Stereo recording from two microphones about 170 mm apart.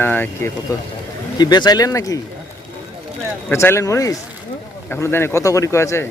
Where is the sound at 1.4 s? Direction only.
25° left (ahead or behind).